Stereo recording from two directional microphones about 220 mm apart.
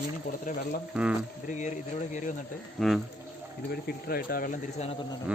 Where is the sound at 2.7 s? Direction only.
Centre (ahead or behind).